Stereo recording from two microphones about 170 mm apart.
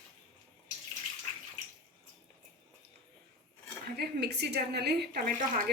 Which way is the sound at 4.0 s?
75° right (ahead or behind).